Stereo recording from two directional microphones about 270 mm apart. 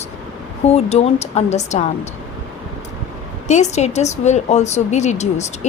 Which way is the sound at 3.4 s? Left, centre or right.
Left.